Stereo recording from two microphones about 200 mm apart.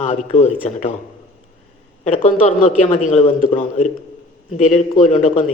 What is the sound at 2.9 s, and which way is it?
A man's voice, 40° left (ahead or behind).